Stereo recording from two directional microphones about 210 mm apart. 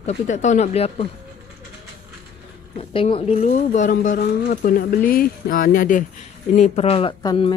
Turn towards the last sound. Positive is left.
turn(degrees=25)  # may be behind; listen again after turning